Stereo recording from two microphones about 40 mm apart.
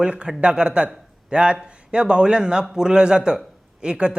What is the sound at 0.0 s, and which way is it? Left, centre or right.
Speech, right.